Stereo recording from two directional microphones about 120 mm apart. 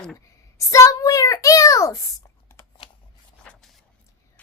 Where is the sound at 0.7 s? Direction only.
25° left (ahead or behind).